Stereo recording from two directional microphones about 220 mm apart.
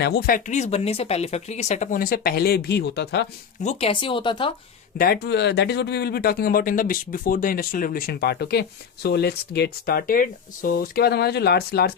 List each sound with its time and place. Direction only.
0.0 s speech: 45° left (ahead or behind)
3.6 s speech: 30° left (ahead or behind)
4.9 s speech: 45° left (ahead or behind)